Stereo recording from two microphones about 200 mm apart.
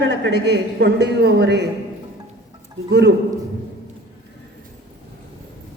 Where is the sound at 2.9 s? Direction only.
60° right (ahead or behind).